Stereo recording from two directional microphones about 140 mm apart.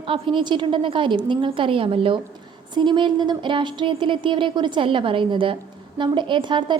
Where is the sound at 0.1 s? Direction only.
35° right (ahead or behind).